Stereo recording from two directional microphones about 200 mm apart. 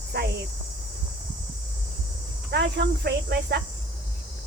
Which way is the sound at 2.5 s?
55° right (ahead or behind).